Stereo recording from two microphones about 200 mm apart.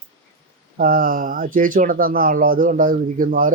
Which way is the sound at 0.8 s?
45° right (ahead or behind).